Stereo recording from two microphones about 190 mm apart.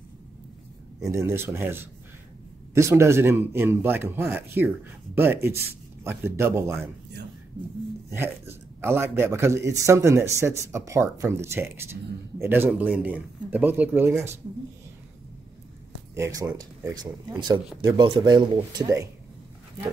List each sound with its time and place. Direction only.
1.0 s a man's voice: 15° right (ahead or behind)
8.1 s a man's voice: 10° right (ahead or behind)
16.2 s speech: 20° right (ahead or behind)